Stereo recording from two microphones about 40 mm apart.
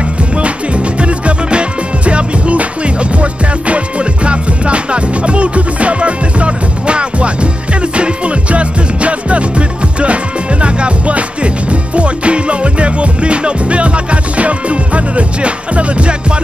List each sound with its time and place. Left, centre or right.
1.0 s music: right